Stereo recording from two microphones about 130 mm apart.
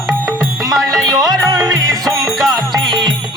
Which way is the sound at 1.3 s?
30° right (ahead or behind).